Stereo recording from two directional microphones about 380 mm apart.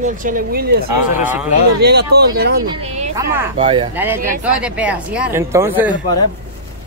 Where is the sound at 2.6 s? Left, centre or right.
Centre.